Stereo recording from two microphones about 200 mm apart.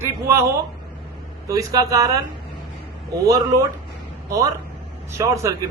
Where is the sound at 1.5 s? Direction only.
15° right (ahead or behind).